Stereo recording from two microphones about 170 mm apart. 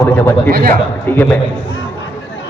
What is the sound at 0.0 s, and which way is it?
A man's voice, 15° left (ahead or behind).